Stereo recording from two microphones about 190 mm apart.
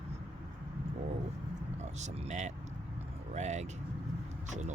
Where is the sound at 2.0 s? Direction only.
35° right (ahead or behind).